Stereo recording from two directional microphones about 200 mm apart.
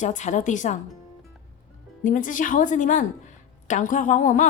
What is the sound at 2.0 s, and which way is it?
Speech, 40° left (ahead or behind).